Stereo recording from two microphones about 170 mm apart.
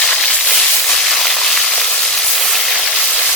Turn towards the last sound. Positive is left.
turn(degrees=5)  # may be behind; listen again after turning